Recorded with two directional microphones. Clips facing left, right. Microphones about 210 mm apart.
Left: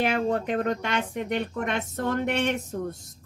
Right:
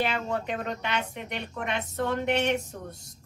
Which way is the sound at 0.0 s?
50° left (ahead or behind).